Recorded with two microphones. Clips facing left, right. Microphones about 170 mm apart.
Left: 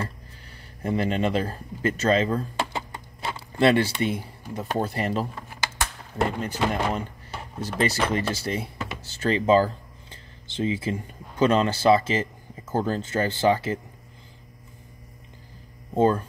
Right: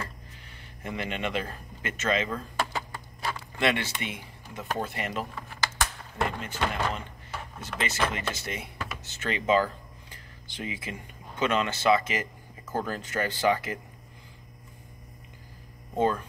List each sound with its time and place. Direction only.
0.8 s speech: 35° left (ahead or behind)
2.7 s a sound: 25° left (ahead or behind)
6.1 s speech: 35° left (ahead or behind)
15.9 s speech: 35° left (ahead or behind)